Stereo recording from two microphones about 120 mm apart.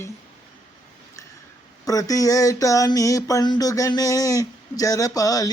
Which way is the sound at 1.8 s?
30° left (ahead or behind).